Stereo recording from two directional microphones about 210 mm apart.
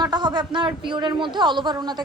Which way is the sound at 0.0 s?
20° right (ahead or behind).